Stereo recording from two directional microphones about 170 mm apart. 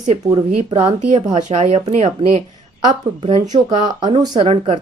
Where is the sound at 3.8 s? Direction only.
25° right (ahead or behind).